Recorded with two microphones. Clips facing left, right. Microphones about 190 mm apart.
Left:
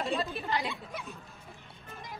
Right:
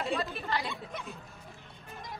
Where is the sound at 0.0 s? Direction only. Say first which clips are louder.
Even; 15° left (ahead or behind).